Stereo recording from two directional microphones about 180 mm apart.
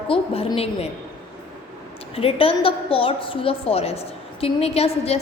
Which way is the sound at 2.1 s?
30° left (ahead or behind).